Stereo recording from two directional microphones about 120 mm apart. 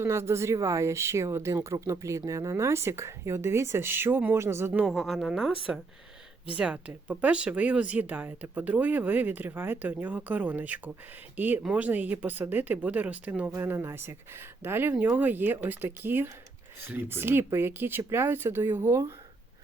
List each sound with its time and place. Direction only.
0.0 s speech: 20° right (ahead or behind)
4.9 s speech: centre (ahead or behind); by 19.1 s 25° right (ahead or behind)